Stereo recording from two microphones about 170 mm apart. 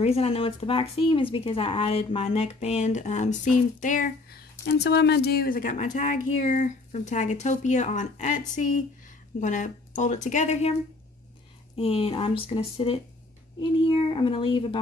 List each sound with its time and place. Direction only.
0.0 s speech: 35° left (ahead or behind)